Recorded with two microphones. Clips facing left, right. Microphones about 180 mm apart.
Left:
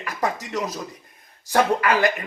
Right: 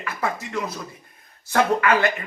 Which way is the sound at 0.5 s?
40° left (ahead or behind).